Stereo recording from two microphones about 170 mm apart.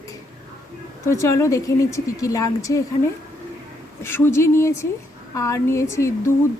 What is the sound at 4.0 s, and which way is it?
A woman's voice, 15° left (ahead or behind).